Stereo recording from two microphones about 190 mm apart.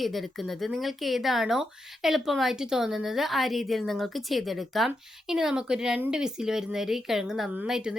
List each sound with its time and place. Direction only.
0.0 s speech: centre (ahead or behind)